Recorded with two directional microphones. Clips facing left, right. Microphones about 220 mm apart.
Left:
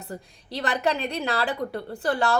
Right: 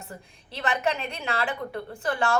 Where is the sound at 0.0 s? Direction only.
35° left (ahead or behind).